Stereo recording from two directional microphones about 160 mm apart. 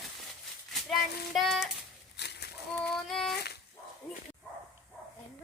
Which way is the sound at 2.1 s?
90° left.